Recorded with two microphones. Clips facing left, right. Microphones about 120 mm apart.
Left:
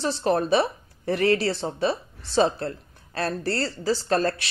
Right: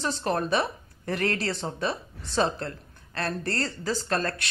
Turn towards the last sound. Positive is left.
turn(degrees=30)  # may be behind; listen again after turning